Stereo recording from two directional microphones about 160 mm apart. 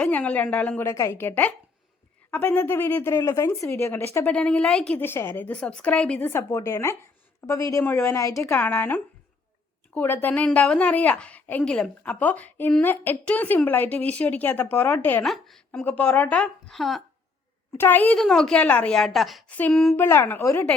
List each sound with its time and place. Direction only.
0.0 s speech: 10° left (ahead or behind)
15.2 s a woman's voice: centre (ahead or behind)
17.7 s a woman's voice: 10° left (ahead or behind)
20.0 s speech: 15° left (ahead or behind)